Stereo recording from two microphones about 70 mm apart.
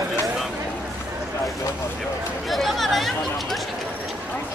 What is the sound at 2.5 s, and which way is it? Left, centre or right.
Chatter, centre.